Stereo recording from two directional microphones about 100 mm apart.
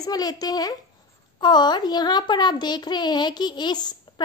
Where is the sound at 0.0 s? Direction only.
40° left (ahead or behind).